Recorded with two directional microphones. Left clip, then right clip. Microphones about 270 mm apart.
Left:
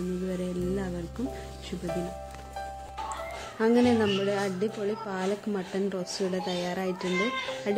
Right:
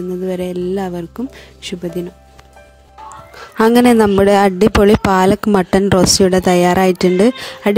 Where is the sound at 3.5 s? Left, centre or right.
Right.